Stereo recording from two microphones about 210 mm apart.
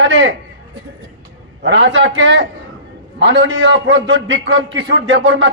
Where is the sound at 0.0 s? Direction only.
60° right (ahead or behind).